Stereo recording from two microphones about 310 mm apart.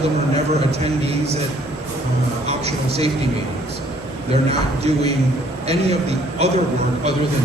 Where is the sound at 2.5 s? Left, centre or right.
Centre.